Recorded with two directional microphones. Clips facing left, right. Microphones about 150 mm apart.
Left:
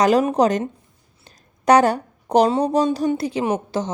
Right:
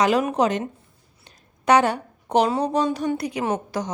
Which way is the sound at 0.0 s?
35° left (ahead or behind).